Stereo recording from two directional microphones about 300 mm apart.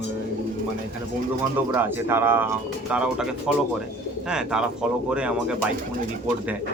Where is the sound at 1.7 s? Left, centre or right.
Centre.